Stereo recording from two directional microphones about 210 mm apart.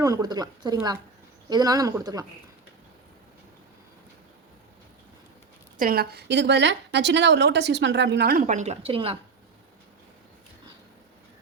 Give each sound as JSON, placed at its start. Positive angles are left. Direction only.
{"t": 0.0, "sound": "speech", "side_deg": -15}
{"t": 5.7, "sound": "a woman's voice", "side_deg": -45}